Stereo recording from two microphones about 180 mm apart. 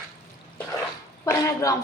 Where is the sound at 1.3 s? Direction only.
20° left (ahead or behind).